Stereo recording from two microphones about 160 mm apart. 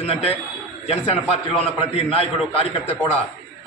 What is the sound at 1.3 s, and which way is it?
Speech, 35° left (ahead or behind).